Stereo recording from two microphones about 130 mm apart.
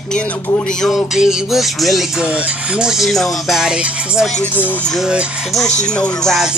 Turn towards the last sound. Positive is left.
turn(degrees=0)  # may be behind; listen again after turning